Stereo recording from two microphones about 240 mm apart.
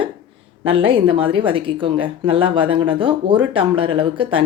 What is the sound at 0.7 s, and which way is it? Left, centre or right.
Speech, right.